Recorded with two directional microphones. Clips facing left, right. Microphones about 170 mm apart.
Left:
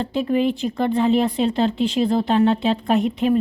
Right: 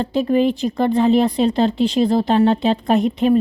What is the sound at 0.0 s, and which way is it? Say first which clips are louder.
Speech: right 3 dB; 35° right (ahead or behind).